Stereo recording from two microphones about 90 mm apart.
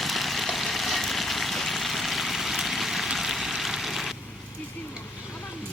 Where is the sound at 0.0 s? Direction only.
Centre (ahead or behind).